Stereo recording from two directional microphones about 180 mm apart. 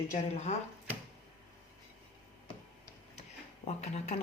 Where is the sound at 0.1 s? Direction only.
40° left (ahead or behind).